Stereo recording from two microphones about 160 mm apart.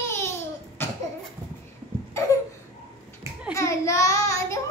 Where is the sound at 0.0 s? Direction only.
15° left (ahead or behind).